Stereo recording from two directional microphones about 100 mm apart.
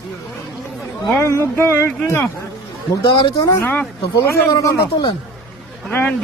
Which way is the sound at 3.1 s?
55° left (ahead or behind).